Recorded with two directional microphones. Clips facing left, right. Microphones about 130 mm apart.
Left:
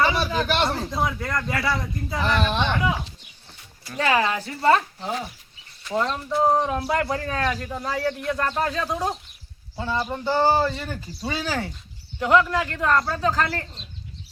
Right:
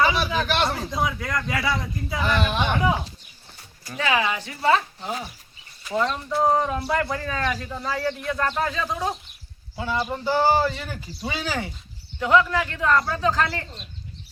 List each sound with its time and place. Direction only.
0.0 s a man's voice: 10° right (ahead or behind)
4.1 s a man's voice: 5° right (ahead or behind)
4.4 s a woman's voice: 40° left (ahead or behind)
4.9 s speech: centre (ahead or behind)
6.3 s a man's voice: centre (ahead or behind)